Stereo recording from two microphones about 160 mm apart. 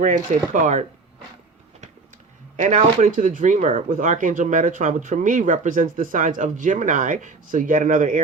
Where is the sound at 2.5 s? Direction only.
50° right (ahead or behind).